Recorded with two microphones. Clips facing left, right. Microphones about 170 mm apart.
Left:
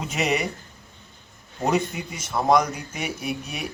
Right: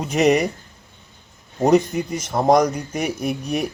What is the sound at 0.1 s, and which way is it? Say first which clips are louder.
Speech: right 9 dB; 40° right (ahead or behind).